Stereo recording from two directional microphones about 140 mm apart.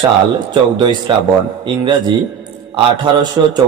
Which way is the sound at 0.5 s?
35° right (ahead or behind).